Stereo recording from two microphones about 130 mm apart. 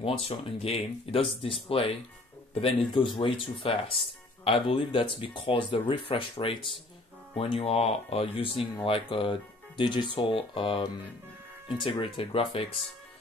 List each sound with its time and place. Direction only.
0.0 s speech: 50° left (ahead or behind)